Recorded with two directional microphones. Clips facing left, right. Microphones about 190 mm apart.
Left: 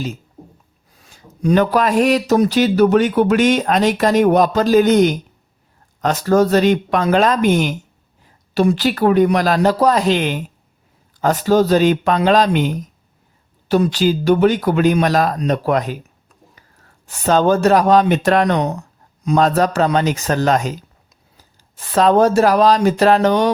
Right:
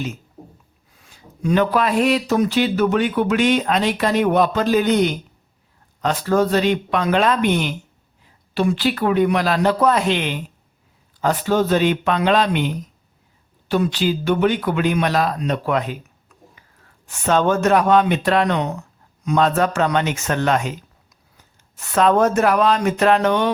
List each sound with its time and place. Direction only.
1.0 s speech: 40° left (ahead or behind)
16.3 s whispering: 35° left (ahead or behind)
17.1 s speech: 35° left (ahead or behind)